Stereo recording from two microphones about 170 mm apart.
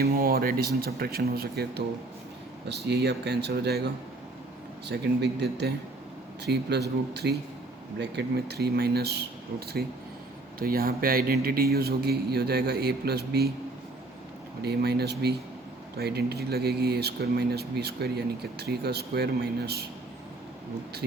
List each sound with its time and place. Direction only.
0.0 s a man's voice: 60° right (ahead or behind)
2.6 s speech: 80° right
4.9 s a man's voice: 80° right
14.6 s speech: 70° right (ahead or behind)